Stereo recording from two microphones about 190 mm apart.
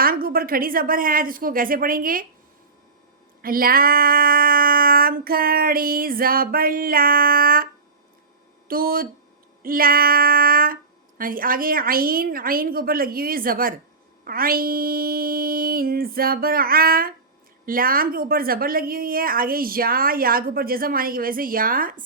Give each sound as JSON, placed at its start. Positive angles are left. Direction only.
{"t": 0.0, "sound": "a woman's voice", "side_deg": -50}
{"t": 3.4, "sound": "a woman's voice", "side_deg": -50}